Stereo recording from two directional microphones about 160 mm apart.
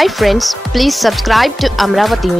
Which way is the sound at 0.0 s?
Centre (ahead or behind).